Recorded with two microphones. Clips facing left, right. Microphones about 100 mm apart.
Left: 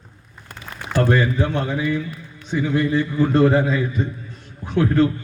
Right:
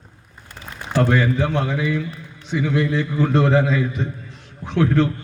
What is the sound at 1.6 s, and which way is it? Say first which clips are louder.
Mantra: even; 15° left (ahead or behind).